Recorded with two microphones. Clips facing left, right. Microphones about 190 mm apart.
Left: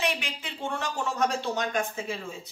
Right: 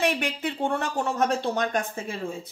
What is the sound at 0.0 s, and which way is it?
A woman's voice, 55° right (ahead or behind).